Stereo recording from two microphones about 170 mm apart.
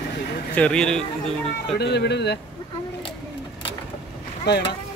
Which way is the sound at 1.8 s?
80° left.